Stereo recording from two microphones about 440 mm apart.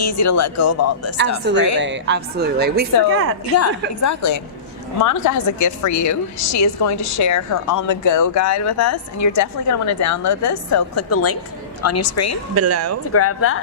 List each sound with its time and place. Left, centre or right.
0.0 s a woman's voice: left
1.1 s speech: right
3.5 s a woman's voice: left
12.5 s speech: right
13.1 s a woman's voice: left